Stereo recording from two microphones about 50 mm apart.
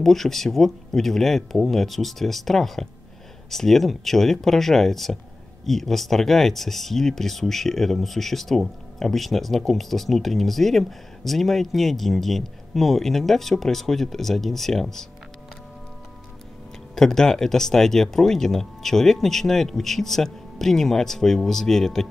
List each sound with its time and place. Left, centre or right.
0.0 s speech: centre
16.9 s speech: centre